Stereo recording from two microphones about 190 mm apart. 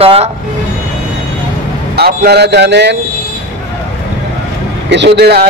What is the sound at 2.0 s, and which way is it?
Speech, 55° right (ahead or behind).